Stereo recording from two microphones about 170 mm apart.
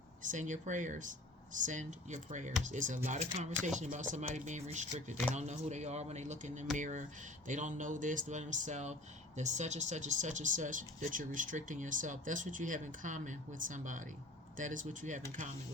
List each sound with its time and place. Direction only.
0.2 s speech: 45° right (ahead or behind)